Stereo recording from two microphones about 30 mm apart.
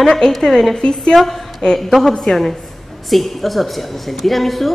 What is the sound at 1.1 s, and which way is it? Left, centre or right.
A woman's voice, centre.